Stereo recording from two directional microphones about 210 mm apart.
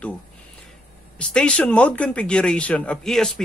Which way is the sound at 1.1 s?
5° left (ahead or behind).